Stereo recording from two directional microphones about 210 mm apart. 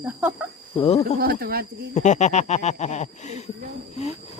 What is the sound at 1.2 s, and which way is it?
Speech, 45° right (ahead or behind).